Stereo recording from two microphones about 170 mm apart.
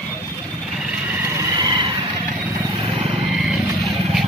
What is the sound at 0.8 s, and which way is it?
Vehicle, 10° right (ahead or behind).